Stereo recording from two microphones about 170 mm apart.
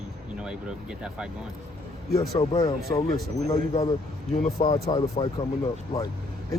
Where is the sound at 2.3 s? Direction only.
35° left (ahead or behind).